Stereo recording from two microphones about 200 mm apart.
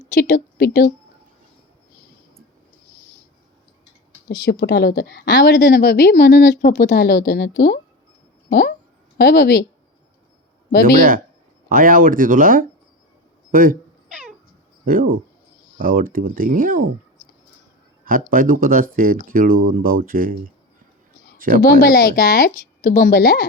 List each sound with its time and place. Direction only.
0.1 s a woman's voice: 60° left (ahead or behind)
4.4 s a woman's voice: 60° left (ahead or behind)
11.7 s speech: 45° right (ahead or behind)
14.1 s a sound: 5° right (ahead or behind)
14.8 s speech: 45° right (ahead or behind)
18.0 s speech: 45° right (ahead or behind)
21.3 s a sound: 45° right (ahead or behind)
21.8 s speech: 50° left (ahead or behind)